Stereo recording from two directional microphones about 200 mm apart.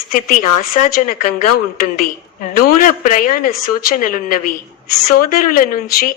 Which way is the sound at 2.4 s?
45° left (ahead or behind).